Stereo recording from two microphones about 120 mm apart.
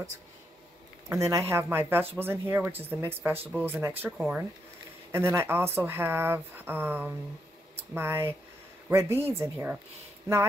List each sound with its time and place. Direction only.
1.0 s speech: 25° right (ahead or behind)
5.1 s speech: 20° right (ahead or behind)